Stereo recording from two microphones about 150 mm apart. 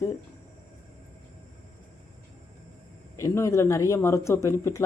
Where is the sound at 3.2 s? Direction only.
20° left (ahead or behind).